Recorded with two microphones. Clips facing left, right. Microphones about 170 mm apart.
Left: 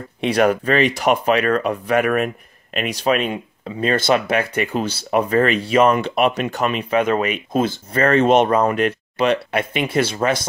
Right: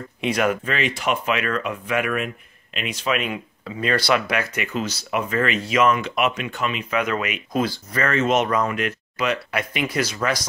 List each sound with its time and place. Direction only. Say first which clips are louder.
0.2 s speech: left 5 dB; 35° left (ahead or behind)
6.9 s speech: left 6 dB; 30° left (ahead or behind)